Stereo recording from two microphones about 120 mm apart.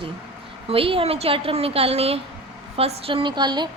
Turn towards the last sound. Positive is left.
turn(degrees=-40)  # may be behind; listen again after turning